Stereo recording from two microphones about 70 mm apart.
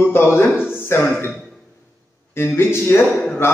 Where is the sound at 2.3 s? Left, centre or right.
Left.